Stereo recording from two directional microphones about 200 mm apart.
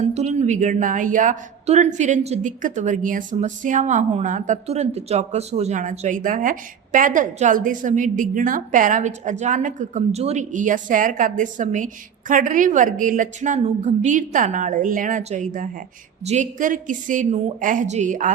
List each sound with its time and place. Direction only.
0.0 s a woman's voice: 35° right (ahead or behind)